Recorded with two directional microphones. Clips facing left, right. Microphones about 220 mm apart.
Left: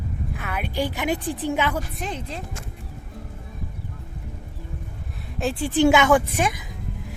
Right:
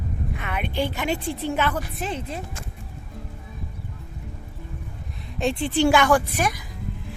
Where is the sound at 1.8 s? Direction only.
5° right (ahead or behind).